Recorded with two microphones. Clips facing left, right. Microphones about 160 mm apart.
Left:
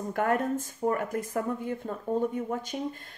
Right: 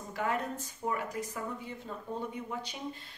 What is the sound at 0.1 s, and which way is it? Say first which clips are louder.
Speech: left 6 dB; 50° left (ahead or behind).